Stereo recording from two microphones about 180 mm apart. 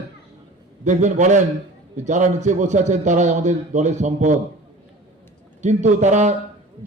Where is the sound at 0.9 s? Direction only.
45° right (ahead or behind).